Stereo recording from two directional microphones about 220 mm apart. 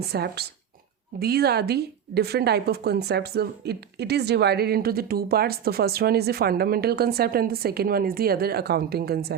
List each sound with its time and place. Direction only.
0.0 s a woman's voice: 45° right (ahead or behind)